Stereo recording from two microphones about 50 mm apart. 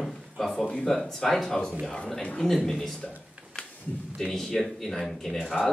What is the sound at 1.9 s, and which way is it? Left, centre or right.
Speech, centre.